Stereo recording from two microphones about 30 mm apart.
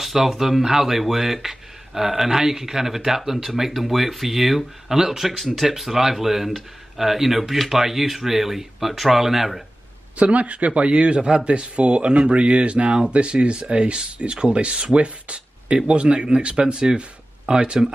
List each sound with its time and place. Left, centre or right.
0.0 s speech: centre
4.9 s speech: centre
5.6 s speech: centre
10.1 s speech: right